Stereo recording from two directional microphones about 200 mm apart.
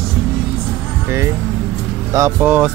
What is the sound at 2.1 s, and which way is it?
Speech, 10° right (ahead or behind).